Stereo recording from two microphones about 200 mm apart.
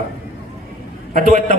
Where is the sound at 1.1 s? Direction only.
35° right (ahead or behind).